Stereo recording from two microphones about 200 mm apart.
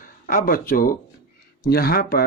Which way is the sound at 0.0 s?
45° left (ahead or behind).